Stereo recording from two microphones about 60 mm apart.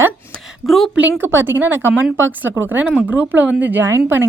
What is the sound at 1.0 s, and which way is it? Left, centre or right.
A woman's voice, right.